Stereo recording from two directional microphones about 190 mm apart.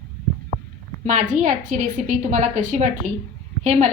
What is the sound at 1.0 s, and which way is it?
A woman's voice, 40° right (ahead or behind).